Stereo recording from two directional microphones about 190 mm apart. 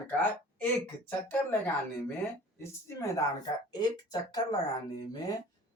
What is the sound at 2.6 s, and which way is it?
A woman's voice, 15° left (ahead or behind).